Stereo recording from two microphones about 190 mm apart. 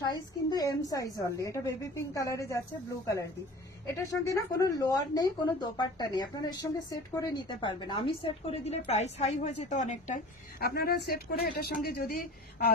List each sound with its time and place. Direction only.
0.0 s a woman's voice: 20° left (ahead or behind)
3.9 s a woman's voice: 15° left (ahead or behind); by 10.2 s 40° left (ahead or behind)
10.6 s speech: 55° left (ahead or behind)